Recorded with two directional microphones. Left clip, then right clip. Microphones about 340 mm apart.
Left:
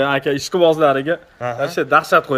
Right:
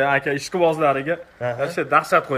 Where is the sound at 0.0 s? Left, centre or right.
Left.